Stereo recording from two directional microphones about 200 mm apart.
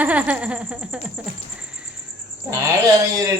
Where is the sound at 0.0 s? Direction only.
5° right (ahead or behind).